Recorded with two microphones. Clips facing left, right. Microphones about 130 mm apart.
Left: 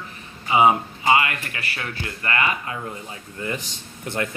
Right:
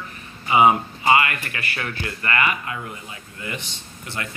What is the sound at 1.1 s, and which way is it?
Speech, 15° left (ahead or behind).